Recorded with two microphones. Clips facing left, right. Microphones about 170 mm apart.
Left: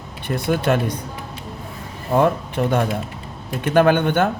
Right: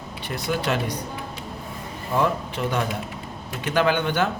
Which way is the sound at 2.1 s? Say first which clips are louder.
Left 6 dB; 55° left (ahead or behind).